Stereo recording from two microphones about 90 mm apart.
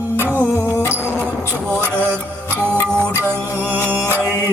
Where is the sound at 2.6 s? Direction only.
15° left (ahead or behind).